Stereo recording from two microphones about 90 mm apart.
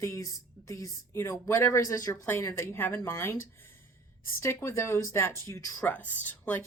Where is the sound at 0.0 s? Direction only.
35° left (ahead or behind).